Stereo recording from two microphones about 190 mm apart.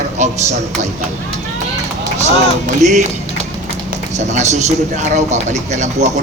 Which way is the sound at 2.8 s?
40° right (ahead or behind).